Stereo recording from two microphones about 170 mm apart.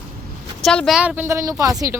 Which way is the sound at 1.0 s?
10° right (ahead or behind).